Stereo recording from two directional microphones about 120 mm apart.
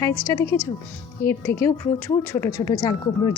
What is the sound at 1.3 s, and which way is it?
Speech, 20° left (ahead or behind).